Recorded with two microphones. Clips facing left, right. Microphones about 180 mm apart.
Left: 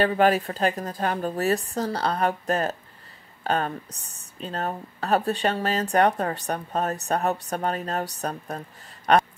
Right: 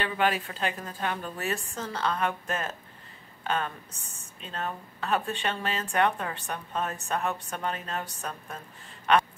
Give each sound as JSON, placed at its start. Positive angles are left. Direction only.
{"t": 0.0, "sound": "speech", "side_deg": 40}